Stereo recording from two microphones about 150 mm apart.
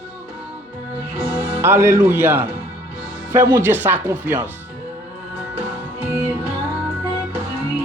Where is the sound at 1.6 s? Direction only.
15° right (ahead or behind).